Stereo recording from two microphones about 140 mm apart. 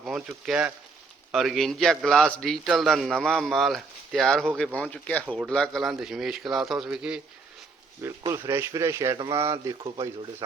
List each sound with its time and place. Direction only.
0.0 s a man's voice: 5° right (ahead or behind)
8.3 s a man's voice: 20° right (ahead or behind)